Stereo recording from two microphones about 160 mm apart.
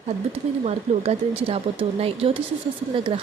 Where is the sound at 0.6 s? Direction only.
40° right (ahead or behind).